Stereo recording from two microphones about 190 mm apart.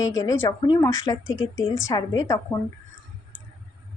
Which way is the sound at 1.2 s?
90° left.